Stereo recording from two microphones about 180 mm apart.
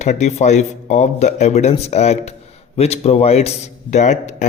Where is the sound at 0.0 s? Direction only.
40° left (ahead or behind).